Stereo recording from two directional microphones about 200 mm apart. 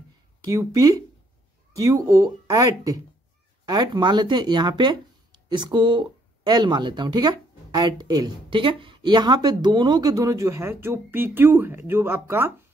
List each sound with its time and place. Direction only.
0.5 s speech: 15° right (ahead or behind)